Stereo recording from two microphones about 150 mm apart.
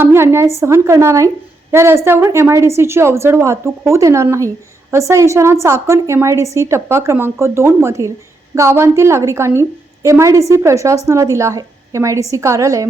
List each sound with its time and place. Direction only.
0.0 s a woman's voice: 15° right (ahead or behind)